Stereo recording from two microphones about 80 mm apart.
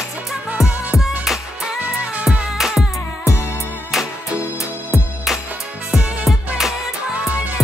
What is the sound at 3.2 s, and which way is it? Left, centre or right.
Music, left.